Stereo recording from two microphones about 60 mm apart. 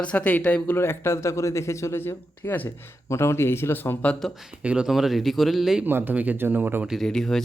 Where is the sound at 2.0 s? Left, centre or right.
Left.